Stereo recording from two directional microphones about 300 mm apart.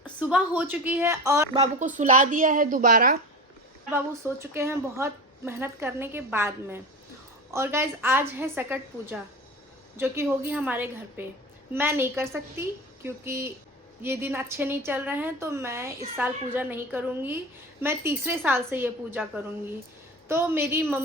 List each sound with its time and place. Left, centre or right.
0.0 s a woman's voice: centre
1.8 s a woman's voice: right
3.9 s a woman's voice: centre